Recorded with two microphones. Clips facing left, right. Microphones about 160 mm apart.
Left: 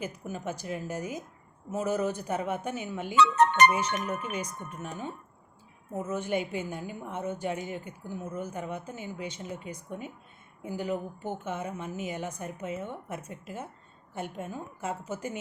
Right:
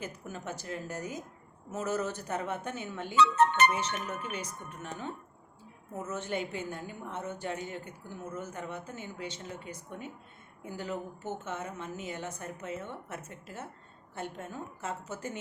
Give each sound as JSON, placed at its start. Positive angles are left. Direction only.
{"t": 0.0, "sound": "a woman's voice", "side_deg": 10}
{"t": 3.2, "sound": "speech", "side_deg": 75}
{"t": 4.3, "sound": "a woman's voice", "side_deg": 10}